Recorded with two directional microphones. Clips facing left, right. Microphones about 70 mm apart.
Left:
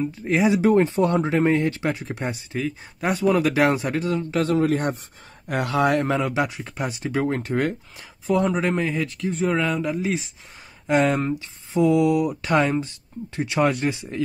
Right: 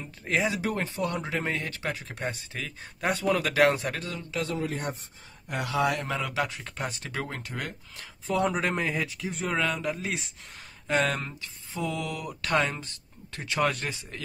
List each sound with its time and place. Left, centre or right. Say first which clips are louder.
0.2 s speech: left 5 dB; centre
0.5 s speech: left 12 dB; left
2.5 s speech: left 10 dB; centre
3.9 s speech: left 12 dB; left
4.2 s speech: left 9 dB; left
6.3 s speech: left 6 dB; centre
7.2 s speech: left 13 dB; left
8.3 s speech: left 5 dB; centre
10.9 s speech: left 7 dB; centre
13.4 s speech: left 7 dB; centre